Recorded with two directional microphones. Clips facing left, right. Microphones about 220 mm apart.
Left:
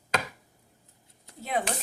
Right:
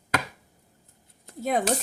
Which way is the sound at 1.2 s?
45° right (ahead or behind).